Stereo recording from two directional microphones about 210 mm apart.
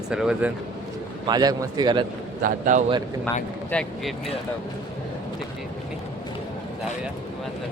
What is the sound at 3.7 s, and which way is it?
Speech, 5° left (ahead or behind).